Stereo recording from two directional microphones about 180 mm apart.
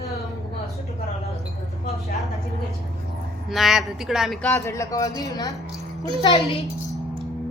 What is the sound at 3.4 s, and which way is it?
A woman's voice, centre (ahead or behind).